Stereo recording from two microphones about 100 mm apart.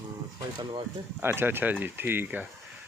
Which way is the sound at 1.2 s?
20° right (ahead or behind).